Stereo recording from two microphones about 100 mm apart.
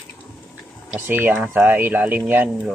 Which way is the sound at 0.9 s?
20° right (ahead or behind).